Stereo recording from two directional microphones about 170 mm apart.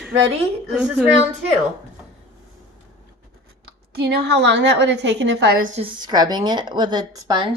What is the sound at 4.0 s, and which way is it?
A woman's voice, 80° right.